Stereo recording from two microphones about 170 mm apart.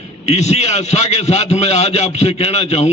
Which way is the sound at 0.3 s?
40° left (ahead or behind).